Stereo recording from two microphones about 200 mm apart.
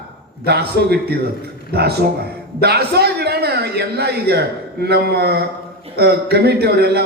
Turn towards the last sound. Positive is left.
turn(degrees=-55)  # may be behind; listen again after turning